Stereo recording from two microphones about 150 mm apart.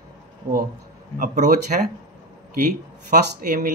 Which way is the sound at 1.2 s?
60° right (ahead or behind).